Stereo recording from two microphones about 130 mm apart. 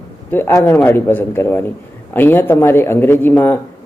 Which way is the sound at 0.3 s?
15° left (ahead or behind).